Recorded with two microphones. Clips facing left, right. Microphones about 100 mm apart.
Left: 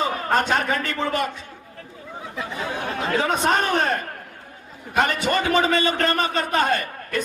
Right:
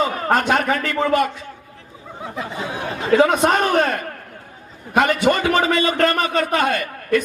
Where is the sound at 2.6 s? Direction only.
Centre (ahead or behind).